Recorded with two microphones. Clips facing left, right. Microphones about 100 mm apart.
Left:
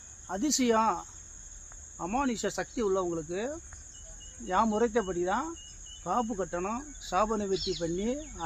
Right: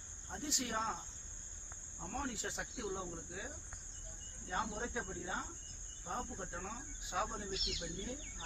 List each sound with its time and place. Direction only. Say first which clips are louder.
0.3 s cricket: left 16 dB; 90° left
7.8 s speech: left 14 dB; 80° left